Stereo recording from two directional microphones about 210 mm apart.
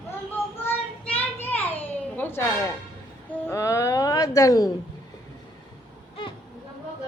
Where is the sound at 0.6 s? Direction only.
10° left (ahead or behind).